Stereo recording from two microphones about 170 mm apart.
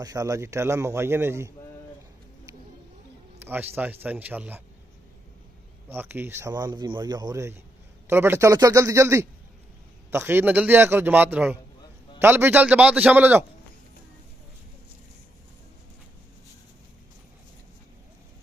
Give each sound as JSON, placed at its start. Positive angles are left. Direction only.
{"t": 0.0, "sound": "a man's voice", "side_deg": -20}
{"t": 3.3, "sound": "a man's voice", "side_deg": -10}
{"t": 5.9, "sound": "a man's voice", "side_deg": -10}